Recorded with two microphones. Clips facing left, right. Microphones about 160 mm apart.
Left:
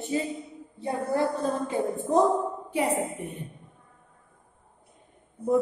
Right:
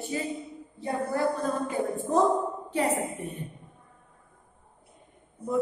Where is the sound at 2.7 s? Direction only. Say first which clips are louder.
Left 1 dB; 15° left (ahead or behind).